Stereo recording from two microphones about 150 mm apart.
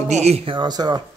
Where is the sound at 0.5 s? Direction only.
30° right (ahead or behind).